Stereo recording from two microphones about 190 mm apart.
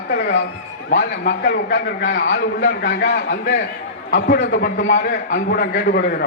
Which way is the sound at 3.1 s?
45° left (ahead or behind).